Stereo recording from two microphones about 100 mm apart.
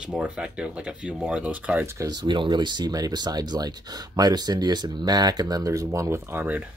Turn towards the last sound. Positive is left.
turn(degrees=-20)  # may be behind; listen again after turning